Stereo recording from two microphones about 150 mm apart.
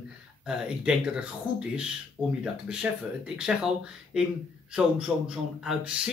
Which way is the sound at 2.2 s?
20° left (ahead or behind).